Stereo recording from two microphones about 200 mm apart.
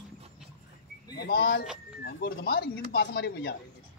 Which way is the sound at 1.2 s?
50° left (ahead or behind).